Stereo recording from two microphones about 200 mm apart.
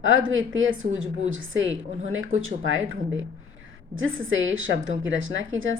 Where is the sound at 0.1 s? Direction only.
75° right (ahead or behind).